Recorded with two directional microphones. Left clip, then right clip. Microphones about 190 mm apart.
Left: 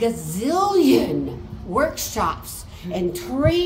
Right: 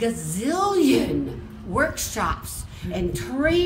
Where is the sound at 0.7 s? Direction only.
5° right (ahead or behind).